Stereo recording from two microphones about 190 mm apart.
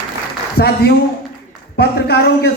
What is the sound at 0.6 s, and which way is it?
A woman's voice, 55° left (ahead or behind).